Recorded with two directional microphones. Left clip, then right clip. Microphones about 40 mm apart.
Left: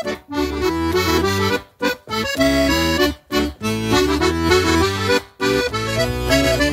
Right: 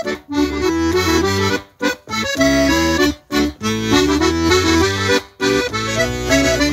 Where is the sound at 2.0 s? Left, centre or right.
Left.